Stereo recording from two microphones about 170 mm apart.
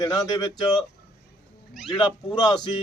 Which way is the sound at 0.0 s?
20° left (ahead or behind).